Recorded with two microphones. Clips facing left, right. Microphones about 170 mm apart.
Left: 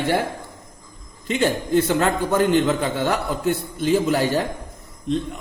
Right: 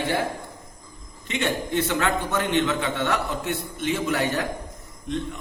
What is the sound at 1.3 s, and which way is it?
A man's voice, 35° left (ahead or behind).